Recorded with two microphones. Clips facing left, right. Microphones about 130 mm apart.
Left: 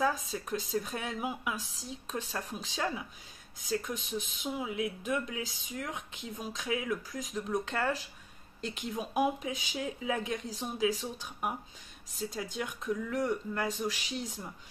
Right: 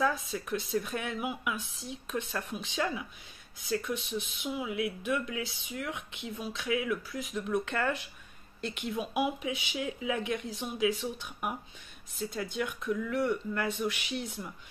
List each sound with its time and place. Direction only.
0.0 s speech: 35° left (ahead or behind)